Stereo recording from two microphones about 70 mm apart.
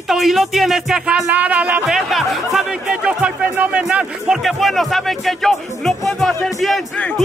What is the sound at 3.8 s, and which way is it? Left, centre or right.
Speech, centre.